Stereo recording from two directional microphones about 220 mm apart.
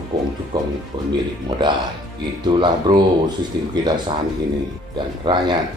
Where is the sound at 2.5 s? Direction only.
20° right (ahead or behind).